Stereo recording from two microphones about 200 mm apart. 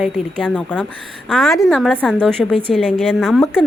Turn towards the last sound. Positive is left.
turn(degrees=0)  # may be behind; listen again after turning